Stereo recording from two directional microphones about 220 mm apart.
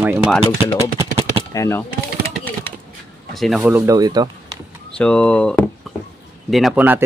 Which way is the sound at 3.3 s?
Centre (ahead or behind).